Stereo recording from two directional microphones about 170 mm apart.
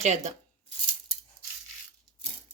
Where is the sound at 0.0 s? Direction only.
45° right (ahead or behind).